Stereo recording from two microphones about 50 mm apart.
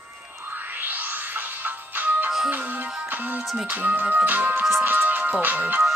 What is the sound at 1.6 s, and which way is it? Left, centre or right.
Music, right.